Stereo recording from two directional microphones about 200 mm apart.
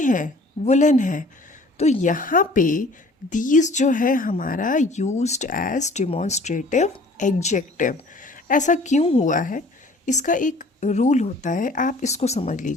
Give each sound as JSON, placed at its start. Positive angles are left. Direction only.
{"t": 0.0, "sound": "a woman's voice", "side_deg": 40}